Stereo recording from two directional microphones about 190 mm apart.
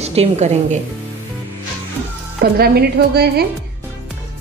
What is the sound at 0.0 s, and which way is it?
Speech, 35° right (ahead or behind).